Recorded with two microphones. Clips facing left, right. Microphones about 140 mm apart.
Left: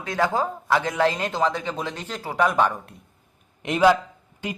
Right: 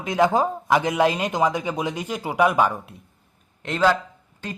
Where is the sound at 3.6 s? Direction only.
15° left (ahead or behind).